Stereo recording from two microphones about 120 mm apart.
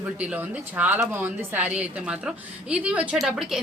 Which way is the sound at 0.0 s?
15° right (ahead or behind).